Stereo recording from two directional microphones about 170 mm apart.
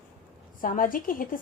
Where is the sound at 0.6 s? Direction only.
55° left (ahead or behind).